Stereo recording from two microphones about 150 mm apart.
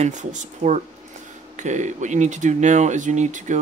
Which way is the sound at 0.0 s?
55° right (ahead or behind).